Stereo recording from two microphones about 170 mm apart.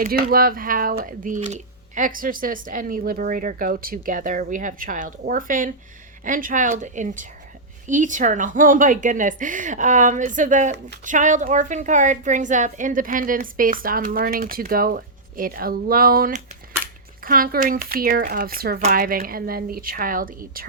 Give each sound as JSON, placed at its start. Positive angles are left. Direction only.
{"t": 0.0, "sound": "a woman's voice", "side_deg": -60}